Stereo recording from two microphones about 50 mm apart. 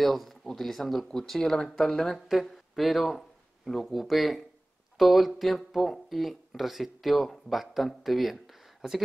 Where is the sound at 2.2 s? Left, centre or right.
Centre.